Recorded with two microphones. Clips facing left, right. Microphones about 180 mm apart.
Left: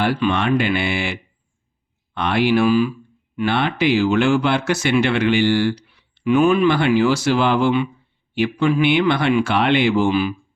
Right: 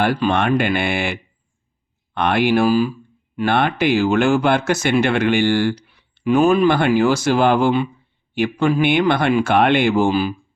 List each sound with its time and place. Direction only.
0.0 s speech: 50° right (ahead or behind)
3.3 s speech: 50° right (ahead or behind)